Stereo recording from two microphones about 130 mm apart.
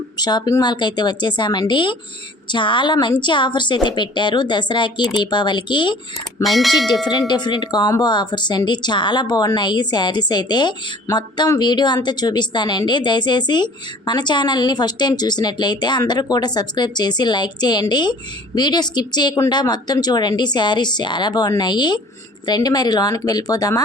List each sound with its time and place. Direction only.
0.2 s speech: 30° left (ahead or behind)
6.4 s speech: centre (ahead or behind)
7.0 s speech: 30° left (ahead or behind)